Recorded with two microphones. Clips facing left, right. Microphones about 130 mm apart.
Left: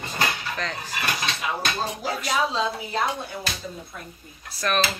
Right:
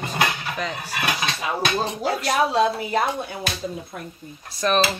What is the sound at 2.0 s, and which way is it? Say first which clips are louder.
Speech: right 4 dB; 60° right (ahead or behind).